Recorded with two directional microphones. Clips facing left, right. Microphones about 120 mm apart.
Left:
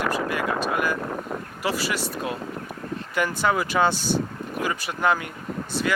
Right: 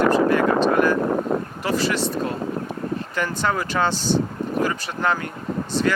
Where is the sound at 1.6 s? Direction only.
10° left (ahead or behind).